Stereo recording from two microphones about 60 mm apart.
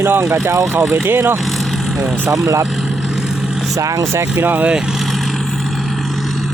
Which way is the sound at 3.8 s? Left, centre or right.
Right.